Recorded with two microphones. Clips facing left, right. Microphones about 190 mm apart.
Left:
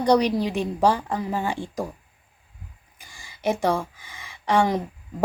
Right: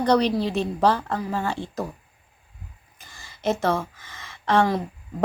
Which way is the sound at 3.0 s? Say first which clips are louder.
Left 1 dB; 10° left (ahead or behind).